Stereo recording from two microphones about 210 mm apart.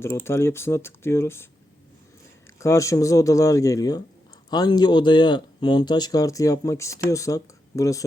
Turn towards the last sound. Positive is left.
turn(degrees=15)  # may be behind; listen again after turning